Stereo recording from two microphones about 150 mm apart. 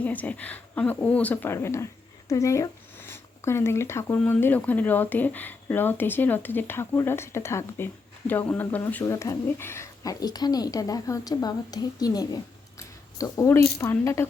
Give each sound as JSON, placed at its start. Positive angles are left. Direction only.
{"t": 0.0, "sound": "speech", "side_deg": 10}